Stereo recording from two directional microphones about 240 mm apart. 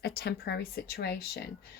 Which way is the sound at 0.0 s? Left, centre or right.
Left.